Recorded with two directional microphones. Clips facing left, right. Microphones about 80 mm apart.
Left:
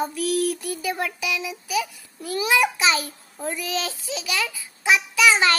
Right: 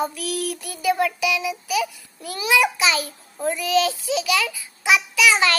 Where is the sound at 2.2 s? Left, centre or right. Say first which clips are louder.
Right 1 dB; left.